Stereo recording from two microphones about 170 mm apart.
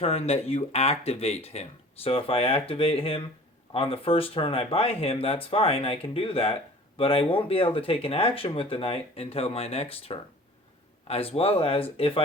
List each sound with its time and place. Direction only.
0.0 s speech: 35° left (ahead or behind)